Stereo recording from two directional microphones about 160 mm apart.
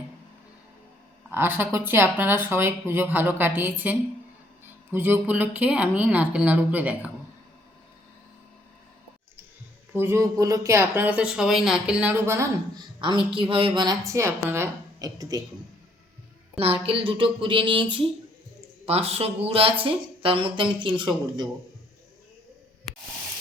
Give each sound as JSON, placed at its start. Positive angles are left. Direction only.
{"t": 1.3, "sound": "speech", "side_deg": -15}
{"t": 9.9, "sound": "speech", "side_deg": -15}
{"t": 13.0, "sound": "speech", "side_deg": -30}
{"t": 16.6, "sound": "speech", "side_deg": -35}
{"t": 18.9, "sound": "speech", "side_deg": -40}